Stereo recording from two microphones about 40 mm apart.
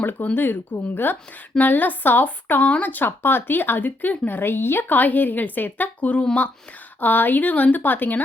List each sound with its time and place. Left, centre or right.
0.0 s a woman's voice: left
3.1 s speech: left
4.9 s a woman's voice: left
7.0 s a woman's voice: left